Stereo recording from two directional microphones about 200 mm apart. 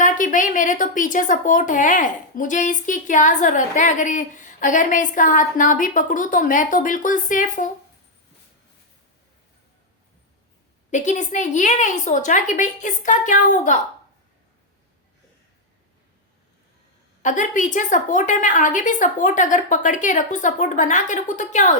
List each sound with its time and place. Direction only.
0.0 s a woman's voice: 40° left (ahead or behind)
10.9 s a woman's voice: 35° left (ahead or behind)
17.2 s a woman's voice: 40° left (ahead or behind)